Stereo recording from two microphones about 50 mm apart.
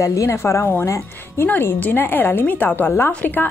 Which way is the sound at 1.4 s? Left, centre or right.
Left.